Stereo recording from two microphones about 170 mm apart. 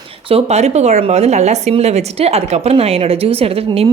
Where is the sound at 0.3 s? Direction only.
35° right (ahead or behind).